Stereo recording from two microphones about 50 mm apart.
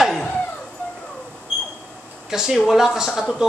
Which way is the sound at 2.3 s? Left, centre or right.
Centre.